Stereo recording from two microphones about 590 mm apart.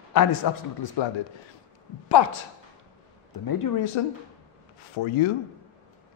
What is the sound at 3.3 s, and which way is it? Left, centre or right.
Speech, left.